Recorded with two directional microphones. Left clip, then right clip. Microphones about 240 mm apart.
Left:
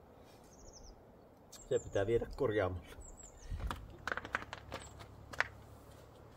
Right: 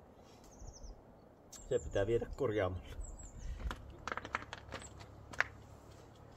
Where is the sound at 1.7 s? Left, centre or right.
Centre.